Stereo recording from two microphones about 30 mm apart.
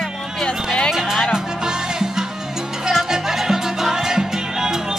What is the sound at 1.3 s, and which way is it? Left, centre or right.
Music, centre.